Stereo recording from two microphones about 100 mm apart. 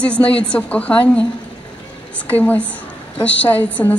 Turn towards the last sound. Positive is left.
turn(degrees=15)  # may be behind; listen again after turning